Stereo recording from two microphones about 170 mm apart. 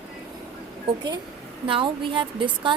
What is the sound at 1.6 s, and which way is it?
A woman's voice, 30° right (ahead or behind).